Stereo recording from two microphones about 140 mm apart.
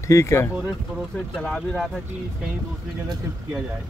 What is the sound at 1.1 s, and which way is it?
Speech, centre (ahead or behind).